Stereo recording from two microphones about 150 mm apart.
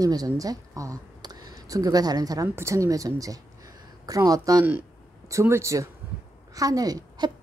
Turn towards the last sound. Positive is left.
turn(degrees=-25)  # may be behind; listen again after turning